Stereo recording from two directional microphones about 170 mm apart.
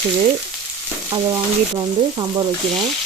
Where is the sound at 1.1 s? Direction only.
25° right (ahead or behind).